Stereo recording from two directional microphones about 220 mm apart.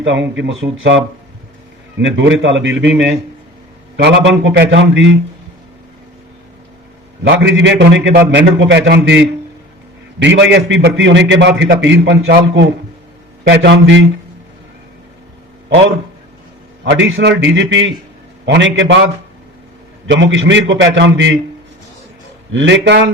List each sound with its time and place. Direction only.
0.0 s a man's voice: 55° right (ahead or behind)
3.9 s a man's voice: 55° right (ahead or behind)
7.3 s a man's voice: 55° right (ahead or behind)
13.5 s a man's voice: 50° right (ahead or behind)
16.8 s a man's voice: 60° right (ahead or behind)
20.1 s a man's voice: 60° right (ahead or behind)
22.5 s a man's voice: 55° right (ahead or behind)